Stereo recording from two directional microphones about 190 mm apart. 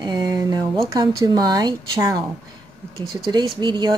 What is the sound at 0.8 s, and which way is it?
A woman's voice, 20° right (ahead or behind).